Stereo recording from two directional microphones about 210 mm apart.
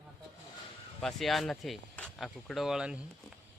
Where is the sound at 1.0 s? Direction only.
Centre (ahead or behind).